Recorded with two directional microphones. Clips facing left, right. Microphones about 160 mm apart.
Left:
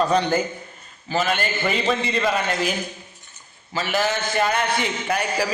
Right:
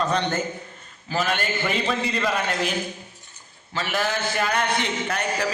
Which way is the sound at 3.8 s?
Centre (ahead or behind).